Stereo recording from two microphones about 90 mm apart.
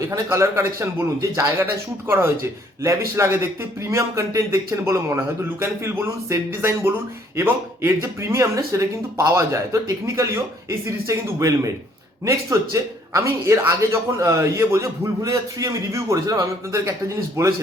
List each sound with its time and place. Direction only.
0.1 s speech: 35° right (ahead or behind)